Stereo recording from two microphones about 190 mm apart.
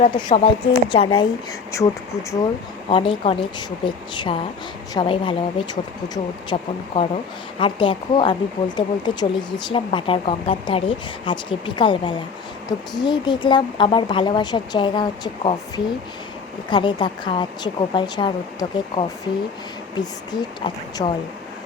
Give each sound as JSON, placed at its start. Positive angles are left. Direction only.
{"t": 0.0, "sound": "speech", "side_deg": 25}
{"t": 2.9, "sound": "speech", "side_deg": 30}